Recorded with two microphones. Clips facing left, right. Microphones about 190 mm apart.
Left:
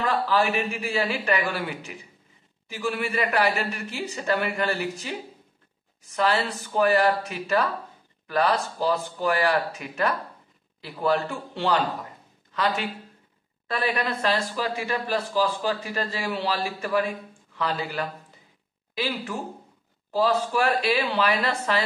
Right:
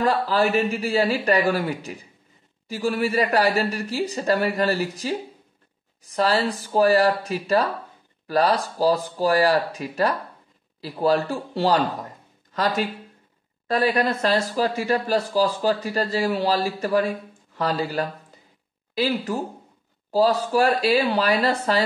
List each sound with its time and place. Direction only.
0.0 s speech: 40° right (ahead or behind)